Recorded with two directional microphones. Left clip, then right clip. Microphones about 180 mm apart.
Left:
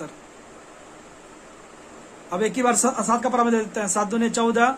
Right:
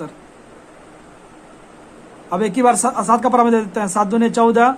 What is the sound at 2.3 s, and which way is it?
Speech, 25° right (ahead or behind).